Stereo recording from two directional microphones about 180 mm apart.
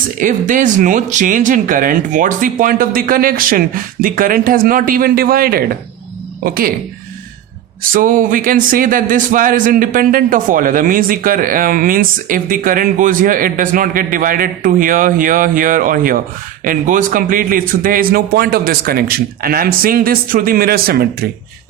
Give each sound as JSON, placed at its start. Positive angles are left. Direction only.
{"t": 0.2, "sound": "a man's voice", "side_deg": -45}
{"t": 7.8, "sound": "a man's voice", "side_deg": -50}